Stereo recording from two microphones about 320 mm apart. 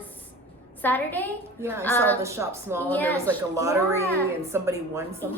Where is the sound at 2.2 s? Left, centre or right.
Centre.